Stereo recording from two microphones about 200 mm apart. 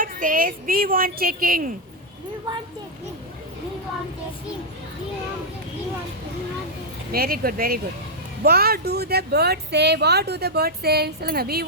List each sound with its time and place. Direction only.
0.0 s speech: 45° right (ahead or behind)
7.1 s speech: 50° right (ahead or behind)